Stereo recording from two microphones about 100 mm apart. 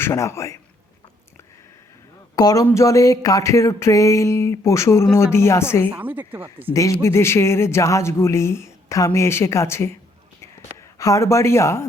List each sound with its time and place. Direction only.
0.0 s a man's voice: 30° left (ahead or behind)
2.3 s a man's voice: 40° left (ahead or behind)
5.9 s speech: 15° right (ahead or behind)
6.7 s speech: 30° left (ahead or behind)
10.9 s speech: 35° left (ahead or behind)